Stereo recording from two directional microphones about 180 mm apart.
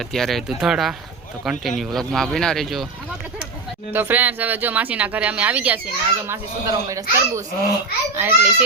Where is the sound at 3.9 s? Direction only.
10° right (ahead or behind).